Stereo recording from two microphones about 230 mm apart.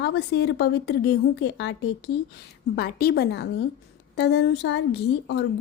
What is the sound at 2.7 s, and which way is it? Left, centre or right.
A woman's voice, left.